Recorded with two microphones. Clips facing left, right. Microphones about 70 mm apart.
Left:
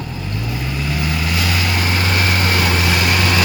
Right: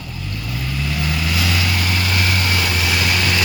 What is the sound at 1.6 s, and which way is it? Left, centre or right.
Vehicle, left.